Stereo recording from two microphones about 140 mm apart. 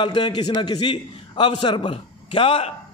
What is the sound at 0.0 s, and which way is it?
A man's voice, 35° left (ahead or behind).